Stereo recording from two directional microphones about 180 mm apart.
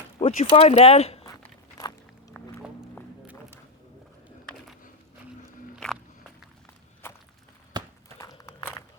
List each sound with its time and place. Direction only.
0.2 s speech: 35° left (ahead or behind)
1.3 s walk: 20° left (ahead or behind)
5.7 s biting: 5° left (ahead or behind)
7.0 s walk: 15° left (ahead or behind)
7.7 s a sound: 25° right (ahead or behind)
8.2 s walk: 15° left (ahead or behind)